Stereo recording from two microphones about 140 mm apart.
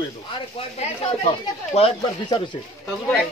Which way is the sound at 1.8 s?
50° left (ahead or behind).